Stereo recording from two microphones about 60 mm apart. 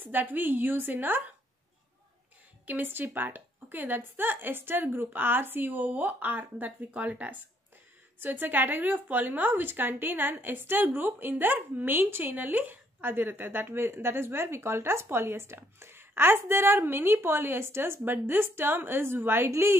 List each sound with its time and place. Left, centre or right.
0.0 s a woman's voice: right
2.6 s a woman's voice: right